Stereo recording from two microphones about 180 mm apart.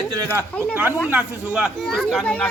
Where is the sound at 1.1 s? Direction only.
5° right (ahead or behind).